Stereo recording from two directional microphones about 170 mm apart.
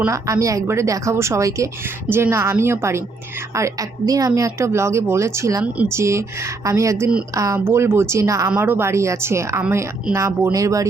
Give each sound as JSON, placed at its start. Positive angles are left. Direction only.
{"t": 0.0, "sound": "speech", "side_deg": -20}